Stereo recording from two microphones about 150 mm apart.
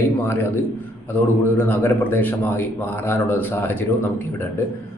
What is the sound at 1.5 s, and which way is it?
Speech, 15° left (ahead or behind).